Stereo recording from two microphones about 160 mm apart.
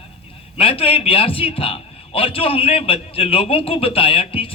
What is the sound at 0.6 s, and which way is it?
A man's voice, 35° left (ahead or behind).